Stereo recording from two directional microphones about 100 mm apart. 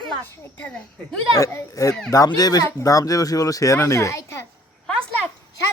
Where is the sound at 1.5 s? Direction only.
35° left (ahead or behind).